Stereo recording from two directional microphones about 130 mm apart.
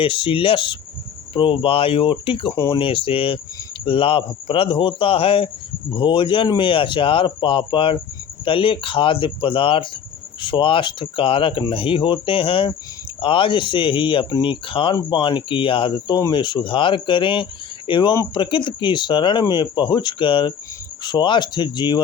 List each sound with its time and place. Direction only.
0.0 s speech: 40° left (ahead or behind)